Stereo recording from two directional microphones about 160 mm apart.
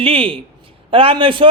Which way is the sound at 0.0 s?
35° right (ahead or behind).